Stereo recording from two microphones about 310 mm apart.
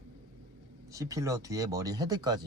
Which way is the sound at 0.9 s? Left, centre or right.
Centre.